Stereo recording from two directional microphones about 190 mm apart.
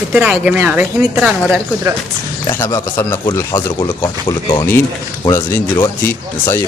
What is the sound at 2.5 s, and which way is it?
Speech, 15° left (ahead or behind).